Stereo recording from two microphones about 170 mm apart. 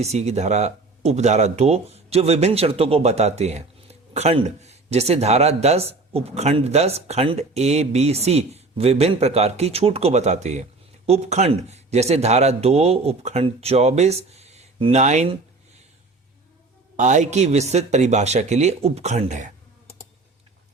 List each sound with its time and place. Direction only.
0.0 s speech: 40° right (ahead or behind)
17.0 s speech: 45° right (ahead or behind)